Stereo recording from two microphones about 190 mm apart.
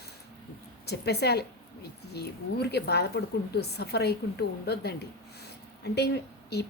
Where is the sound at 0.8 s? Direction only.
60° left (ahead or behind).